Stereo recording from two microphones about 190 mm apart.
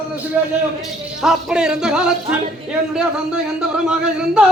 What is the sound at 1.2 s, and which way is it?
Speech, 5° right (ahead or behind).